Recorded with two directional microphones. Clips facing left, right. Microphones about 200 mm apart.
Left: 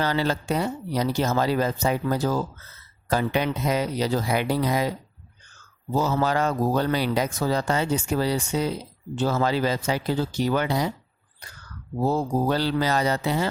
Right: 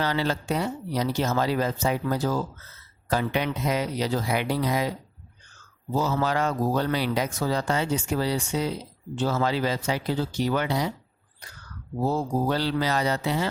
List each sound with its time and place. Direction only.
0.0 s speech: 40° left (ahead or behind)
6.0 s speech: 40° left (ahead or behind)
12.1 s speech: 45° left (ahead or behind)